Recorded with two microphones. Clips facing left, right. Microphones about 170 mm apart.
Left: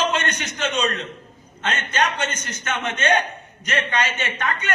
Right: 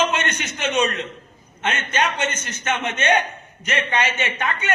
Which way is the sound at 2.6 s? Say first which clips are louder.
Right 1 dB; 20° right (ahead or behind).